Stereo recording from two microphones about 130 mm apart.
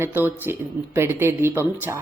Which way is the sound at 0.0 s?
15° right (ahead or behind).